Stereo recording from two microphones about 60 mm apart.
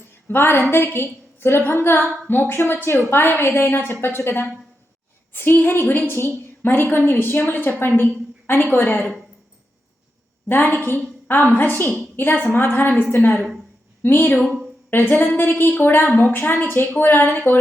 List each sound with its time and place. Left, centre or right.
0.3 s a woman's voice: left
10.5 s a woman's voice: left